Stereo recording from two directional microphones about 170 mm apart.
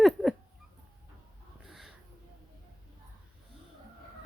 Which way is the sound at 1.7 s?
Centre (ahead or behind).